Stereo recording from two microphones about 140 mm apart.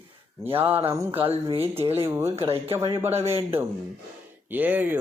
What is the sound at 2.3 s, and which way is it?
Speech, 40° right (ahead or behind).